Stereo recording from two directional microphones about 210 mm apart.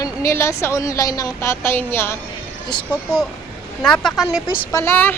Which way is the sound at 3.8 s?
5° left (ahead or behind).